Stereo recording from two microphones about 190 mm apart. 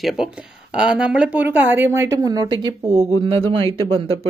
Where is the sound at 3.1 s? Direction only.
30° right (ahead or behind).